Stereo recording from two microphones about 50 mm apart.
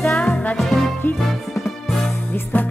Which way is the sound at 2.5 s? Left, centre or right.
Left.